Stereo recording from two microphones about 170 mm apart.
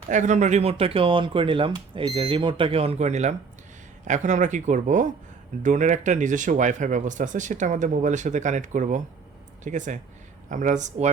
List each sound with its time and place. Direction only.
0.1 s speech: 45° right (ahead or behind)